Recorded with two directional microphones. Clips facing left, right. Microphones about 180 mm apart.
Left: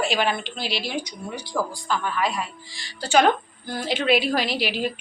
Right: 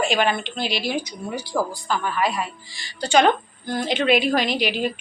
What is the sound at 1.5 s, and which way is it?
Speech, 30° right (ahead or behind).